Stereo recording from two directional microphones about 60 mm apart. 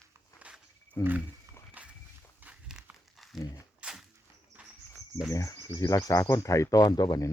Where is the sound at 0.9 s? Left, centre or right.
Left.